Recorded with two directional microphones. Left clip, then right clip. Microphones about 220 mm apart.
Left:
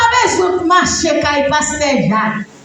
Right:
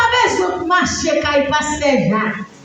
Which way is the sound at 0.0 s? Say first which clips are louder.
Left 2 dB; 50° left (ahead or behind).